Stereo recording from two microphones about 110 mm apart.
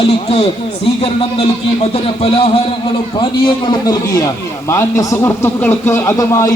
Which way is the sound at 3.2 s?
40° left (ahead or behind).